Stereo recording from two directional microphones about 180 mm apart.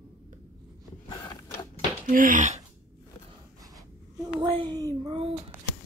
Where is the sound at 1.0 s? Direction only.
20° left (ahead or behind).